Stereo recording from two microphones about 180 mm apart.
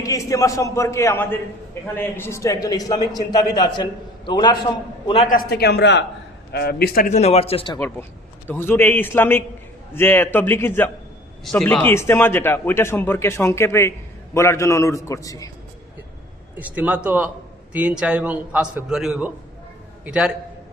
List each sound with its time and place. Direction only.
0.0 s a man's voice: 20° left (ahead or behind); by 5.3 s 35° left (ahead or behind)
5.3 s speech: 60° left (ahead or behind); by 6.1 s 75° left (ahead or behind)
6.5 s speech: 60° left (ahead or behind)
7.1 s a man's voice: 35° left (ahead or behind)
8.4 s a man's voice: 10° left (ahead or behind)
16.6 s a man's voice: 10° right (ahead or behind)